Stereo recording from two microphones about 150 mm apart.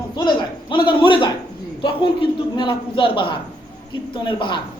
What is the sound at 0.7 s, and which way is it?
Speech, 35° left (ahead or behind).